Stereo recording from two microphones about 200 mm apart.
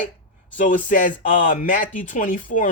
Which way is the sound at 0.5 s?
40° left (ahead or behind).